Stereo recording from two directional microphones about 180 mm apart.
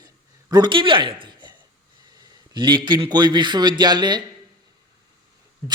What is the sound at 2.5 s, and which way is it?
A man's voice, 25° right (ahead or behind).